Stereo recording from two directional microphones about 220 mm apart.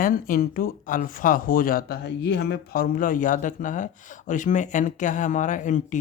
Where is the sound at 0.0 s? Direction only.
40° left (ahead or behind).